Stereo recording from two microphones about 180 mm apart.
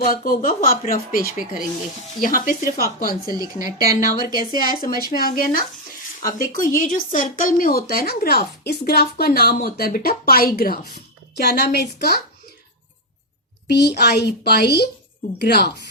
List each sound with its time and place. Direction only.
0.0 s speech: 50° left (ahead or behind)
3.3 s speech: 20° right (ahead or behind)
4.4 s speech: 50° left (ahead or behind)
6.7 s speech: 45° left (ahead or behind); by 12.2 s 65° left (ahead or behind)
13.7 s a woman's voice: 65° left (ahead or behind)